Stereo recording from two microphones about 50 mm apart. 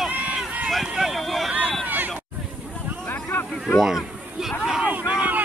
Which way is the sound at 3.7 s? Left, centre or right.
Centre.